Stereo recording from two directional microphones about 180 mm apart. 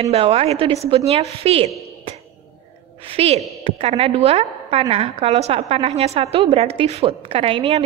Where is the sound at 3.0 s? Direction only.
30° right (ahead or behind).